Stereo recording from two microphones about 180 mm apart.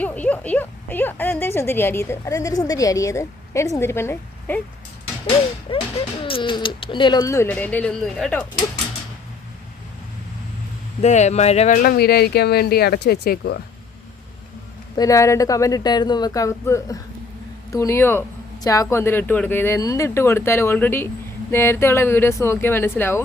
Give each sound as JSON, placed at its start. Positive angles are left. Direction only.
{"t": 0.0, "sound": "speech", "side_deg": 10}
{"t": 5.7, "sound": "a sound", "side_deg": 30}
{"t": 6.2, "sound": "speech", "side_deg": 30}
{"t": 11.0, "sound": "speech", "side_deg": 40}
{"t": 14.9, "sound": "speech", "side_deg": 20}